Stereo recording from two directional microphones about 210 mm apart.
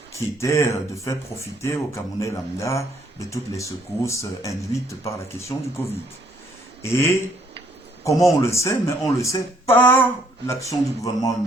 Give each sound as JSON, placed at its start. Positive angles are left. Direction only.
{"t": 0.1, "sound": "speech", "side_deg": 15}
{"t": 6.8, "sound": "speech", "side_deg": 10}